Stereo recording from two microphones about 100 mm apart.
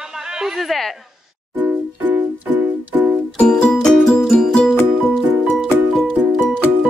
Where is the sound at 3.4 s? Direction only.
5° left (ahead or behind).